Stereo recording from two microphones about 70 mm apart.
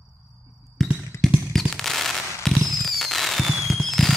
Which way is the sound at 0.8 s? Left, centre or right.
Centre.